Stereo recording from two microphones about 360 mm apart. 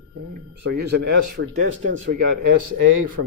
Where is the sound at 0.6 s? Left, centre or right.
Right.